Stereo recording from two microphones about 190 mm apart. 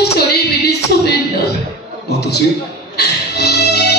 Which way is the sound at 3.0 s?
60° left (ahead or behind).